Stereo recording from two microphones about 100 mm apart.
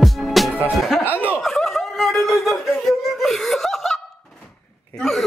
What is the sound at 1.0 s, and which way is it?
Snicker, 15° left (ahead or behind).